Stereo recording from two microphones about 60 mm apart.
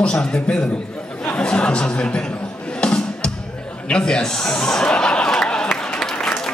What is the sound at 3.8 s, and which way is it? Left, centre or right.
Chuckle, centre.